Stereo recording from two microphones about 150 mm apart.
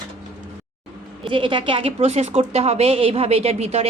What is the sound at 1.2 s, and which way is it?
A woman's voice, 35° right (ahead or behind).